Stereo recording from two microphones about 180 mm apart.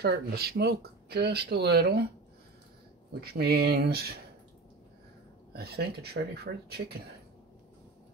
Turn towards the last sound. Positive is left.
turn(degrees=-60)  # may be behind; listen again after turning